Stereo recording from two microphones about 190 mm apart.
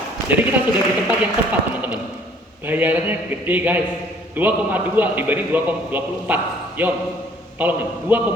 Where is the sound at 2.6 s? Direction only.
10° right (ahead or behind).